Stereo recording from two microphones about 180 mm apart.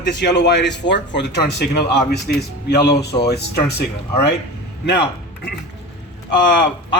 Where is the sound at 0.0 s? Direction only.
75° left (ahead or behind).